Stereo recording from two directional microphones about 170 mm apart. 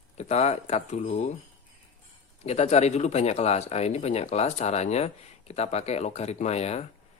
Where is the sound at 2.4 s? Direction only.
40° left (ahead or behind).